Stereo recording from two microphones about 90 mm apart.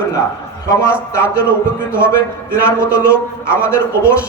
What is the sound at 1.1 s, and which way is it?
Speech, 30° left (ahead or behind).